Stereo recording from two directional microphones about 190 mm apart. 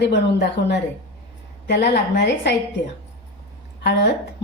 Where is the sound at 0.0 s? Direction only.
60° left (ahead or behind).